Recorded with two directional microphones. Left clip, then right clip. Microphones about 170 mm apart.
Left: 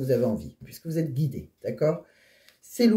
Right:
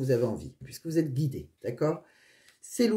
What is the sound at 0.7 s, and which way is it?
Speech, 35° right (ahead or behind).